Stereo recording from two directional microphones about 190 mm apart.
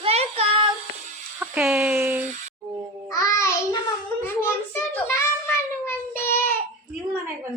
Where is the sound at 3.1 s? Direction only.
15° left (ahead or behind).